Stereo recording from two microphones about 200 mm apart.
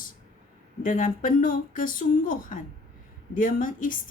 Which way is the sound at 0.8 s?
40° left (ahead or behind).